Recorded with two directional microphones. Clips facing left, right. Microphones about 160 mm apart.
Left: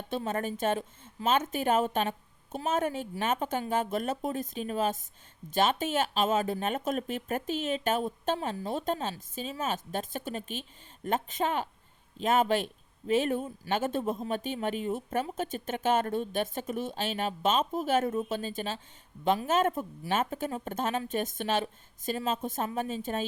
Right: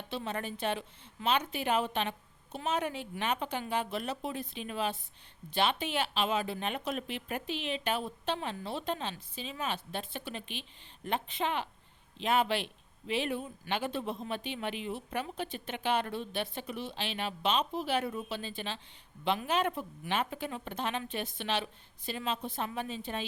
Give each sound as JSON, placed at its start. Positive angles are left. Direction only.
{"t": 0.1, "sound": "speech", "side_deg": 45}